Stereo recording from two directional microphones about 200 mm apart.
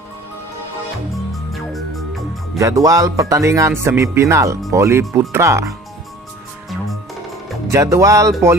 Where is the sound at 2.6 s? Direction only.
15° right (ahead or behind).